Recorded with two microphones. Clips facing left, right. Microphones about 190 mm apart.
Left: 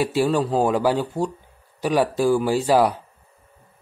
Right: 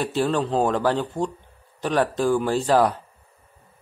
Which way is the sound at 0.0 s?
10° left (ahead or behind).